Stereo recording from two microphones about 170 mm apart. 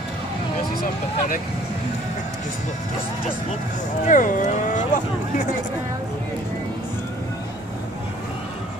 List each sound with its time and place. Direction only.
4.0 s speech: 50° left (ahead or behind)